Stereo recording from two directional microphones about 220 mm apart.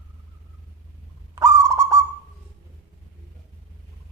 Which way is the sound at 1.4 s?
15° right (ahead or behind).